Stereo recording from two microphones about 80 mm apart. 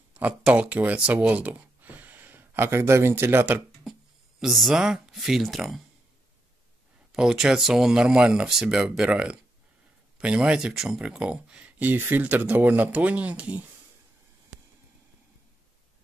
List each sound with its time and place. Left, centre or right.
0.4 s speech: centre
4.4 s speech: centre
7.1 s speech: centre
11.0 s speech: centre